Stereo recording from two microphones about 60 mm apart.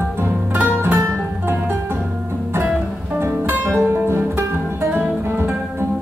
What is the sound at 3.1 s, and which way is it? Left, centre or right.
Music, right.